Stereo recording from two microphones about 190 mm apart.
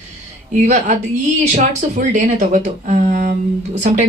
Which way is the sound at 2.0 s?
40° right (ahead or behind).